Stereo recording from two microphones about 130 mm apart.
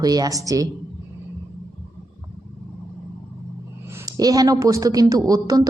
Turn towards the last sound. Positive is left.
turn(degrees=-25)  # may be behind; listen again after turning